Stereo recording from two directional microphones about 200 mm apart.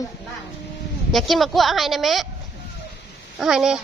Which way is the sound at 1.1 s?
Centre (ahead or behind).